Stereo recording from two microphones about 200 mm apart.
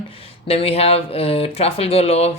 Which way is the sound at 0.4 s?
30° left (ahead or behind).